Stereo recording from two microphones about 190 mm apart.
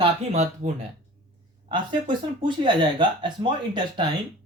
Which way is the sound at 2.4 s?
25° right (ahead or behind).